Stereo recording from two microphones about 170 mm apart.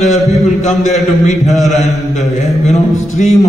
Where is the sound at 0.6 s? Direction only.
40° left (ahead or behind).